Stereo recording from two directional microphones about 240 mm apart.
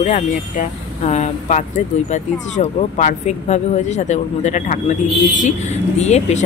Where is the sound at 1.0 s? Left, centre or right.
Left.